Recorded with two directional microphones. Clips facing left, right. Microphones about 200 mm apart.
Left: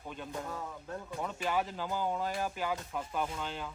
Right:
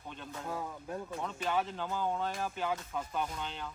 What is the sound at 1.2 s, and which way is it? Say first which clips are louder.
Speech: left 1 dB; 5° left (ahead or behind).